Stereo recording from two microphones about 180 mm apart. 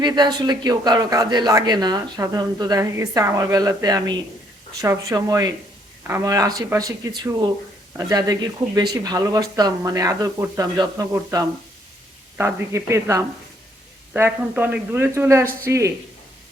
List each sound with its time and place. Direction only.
0.0 s a man's voice: 25° right (ahead or behind)